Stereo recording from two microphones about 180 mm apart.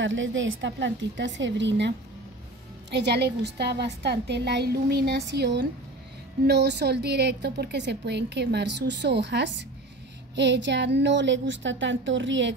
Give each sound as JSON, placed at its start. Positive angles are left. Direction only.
{"t": 0.0, "sound": "a woman's voice", "side_deg": -90}